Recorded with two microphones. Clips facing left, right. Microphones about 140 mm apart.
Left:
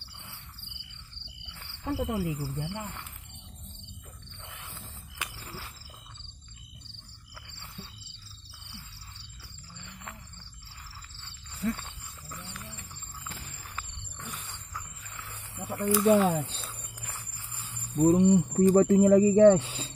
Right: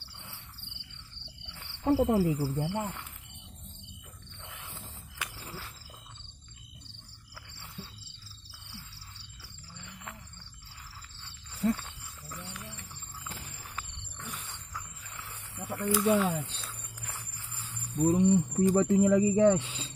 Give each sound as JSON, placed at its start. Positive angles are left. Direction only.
{"t": 1.9, "sound": "cricket", "side_deg": -40}
{"t": 9.8, "sound": "insect", "side_deg": 0}
{"t": 12.3, "sound": "a sound", "side_deg": 0}
{"t": 14.3, "sound": "a sound", "side_deg": 0}
{"t": 15.5, "sound": "snake", "side_deg": 10}
{"t": 15.8, "sound": "snake", "side_deg": 25}
{"t": 16.1, "sound": "speech", "side_deg": 50}
{"t": 17.9, "sound": "speech", "side_deg": 60}
{"t": 18.5, "sound": "speech", "side_deg": 45}